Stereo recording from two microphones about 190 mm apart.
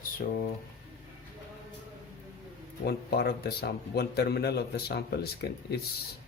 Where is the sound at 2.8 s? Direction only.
55° left (ahead or behind).